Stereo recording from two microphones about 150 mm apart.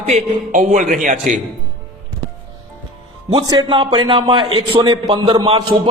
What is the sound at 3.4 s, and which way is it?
A man's voice, 25° right (ahead or behind).